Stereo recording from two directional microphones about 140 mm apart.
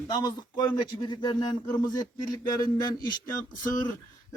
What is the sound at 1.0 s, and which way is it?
Speech, 30° left (ahead or behind).